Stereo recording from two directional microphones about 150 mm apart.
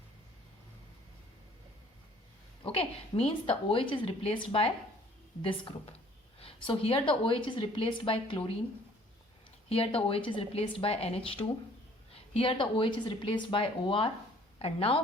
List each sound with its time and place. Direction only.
2.7 s a woman's voice: 40° left (ahead or behind)
9.6 s a woman's voice: 40° left (ahead or behind)